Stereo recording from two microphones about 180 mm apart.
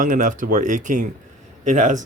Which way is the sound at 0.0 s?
45° right (ahead or behind).